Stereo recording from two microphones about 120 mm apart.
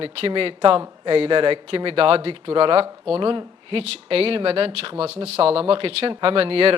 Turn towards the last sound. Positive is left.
turn(degrees=-55)  # may be behind; listen again after turning